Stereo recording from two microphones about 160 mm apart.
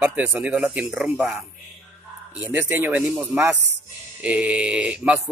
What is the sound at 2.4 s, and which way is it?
A man's voice, 10° right (ahead or behind).